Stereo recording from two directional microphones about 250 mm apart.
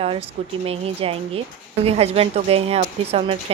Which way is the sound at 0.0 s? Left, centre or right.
Right.